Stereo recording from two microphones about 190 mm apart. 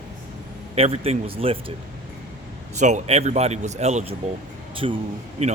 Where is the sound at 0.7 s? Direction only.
30° right (ahead or behind).